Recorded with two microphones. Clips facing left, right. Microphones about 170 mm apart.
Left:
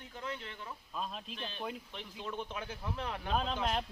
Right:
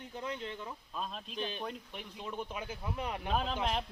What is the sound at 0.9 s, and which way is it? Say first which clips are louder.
Speech: left 1 dB; centre (ahead or behind).